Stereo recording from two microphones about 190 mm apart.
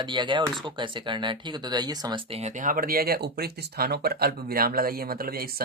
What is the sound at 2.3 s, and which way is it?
Speech, 35° right (ahead or behind).